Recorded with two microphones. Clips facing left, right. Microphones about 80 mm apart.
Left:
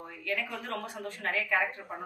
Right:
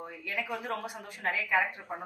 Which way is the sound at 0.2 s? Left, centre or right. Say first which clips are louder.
Left 1 dB; centre.